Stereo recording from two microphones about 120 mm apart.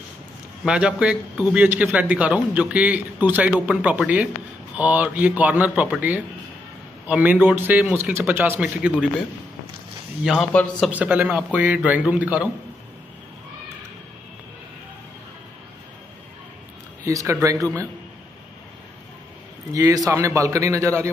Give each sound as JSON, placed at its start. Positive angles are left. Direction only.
{"t": 0.7, "sound": "a man's voice", "side_deg": -10}
{"t": 10.2, "sound": "speech", "side_deg": 0}
{"t": 10.9, "sound": "a man's voice", "side_deg": -10}
{"t": 17.0, "sound": "a man's voice", "side_deg": -25}
{"t": 19.7, "sound": "a man's voice", "side_deg": -30}